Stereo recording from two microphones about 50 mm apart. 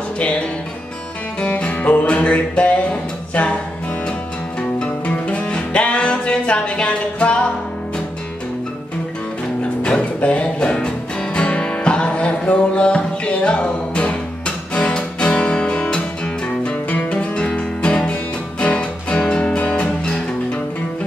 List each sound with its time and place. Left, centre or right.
1.5 s music: left
4.6 s music: left
9.6 s music: left